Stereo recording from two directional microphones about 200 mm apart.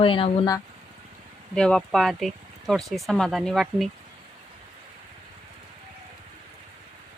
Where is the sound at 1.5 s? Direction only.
5° left (ahead or behind).